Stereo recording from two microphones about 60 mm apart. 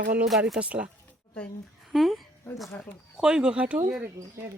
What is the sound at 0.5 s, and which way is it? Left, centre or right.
Speech, right.